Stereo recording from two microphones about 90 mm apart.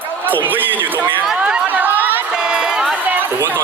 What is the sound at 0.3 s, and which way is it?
Speech, 20° right (ahead or behind).